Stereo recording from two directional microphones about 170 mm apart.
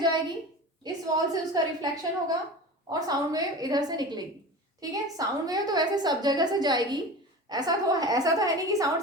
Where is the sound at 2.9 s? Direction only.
20° right (ahead or behind).